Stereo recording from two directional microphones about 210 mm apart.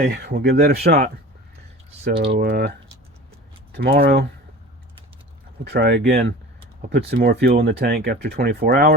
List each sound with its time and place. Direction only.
0.0 s speech: 50° right (ahead or behind)
0.8 s speech: 30° right (ahead or behind)
2.1 s speech: 55° right (ahead or behind)
3.8 s speech: 45° right (ahead or behind)
5.7 s speech: 50° right (ahead or behind)